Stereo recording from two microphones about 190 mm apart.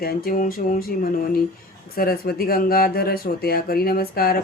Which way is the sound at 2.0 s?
50° left (ahead or behind).